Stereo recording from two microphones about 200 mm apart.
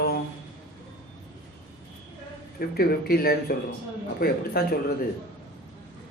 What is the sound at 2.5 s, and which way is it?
Speech, 50° left (ahead or behind).